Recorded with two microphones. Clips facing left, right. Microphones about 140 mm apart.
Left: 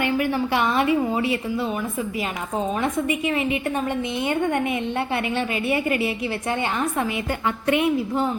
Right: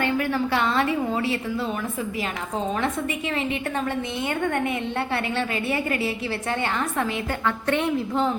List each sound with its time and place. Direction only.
0.0 s a woman's voice: 15° left (ahead or behind)
2.8 s a woman's voice: 15° left (ahead or behind)